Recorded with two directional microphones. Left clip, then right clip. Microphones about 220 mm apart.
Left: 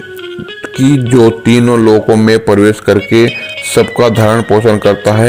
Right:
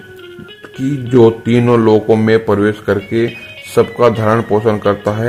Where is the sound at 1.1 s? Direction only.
30° left (ahead or behind).